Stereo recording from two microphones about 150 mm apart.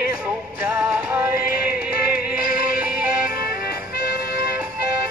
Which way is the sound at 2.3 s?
75° left (ahead or behind).